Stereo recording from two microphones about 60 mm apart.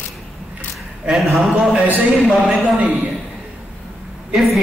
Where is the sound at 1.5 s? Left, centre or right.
Centre.